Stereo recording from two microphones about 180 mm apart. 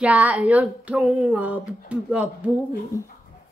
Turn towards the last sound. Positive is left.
turn(degrees=15)  # may be behind; listen again after turning